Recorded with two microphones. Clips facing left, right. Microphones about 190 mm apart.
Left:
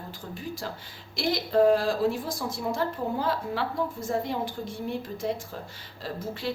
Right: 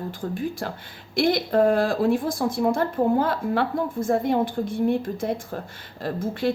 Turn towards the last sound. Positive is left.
turn(degrees=-55)  # may be behind; listen again after turning